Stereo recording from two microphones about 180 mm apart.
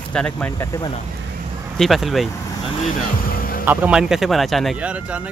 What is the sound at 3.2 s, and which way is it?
Music, 55° left (ahead or behind).